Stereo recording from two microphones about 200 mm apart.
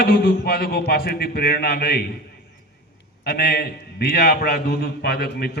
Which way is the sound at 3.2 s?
45° left (ahead or behind).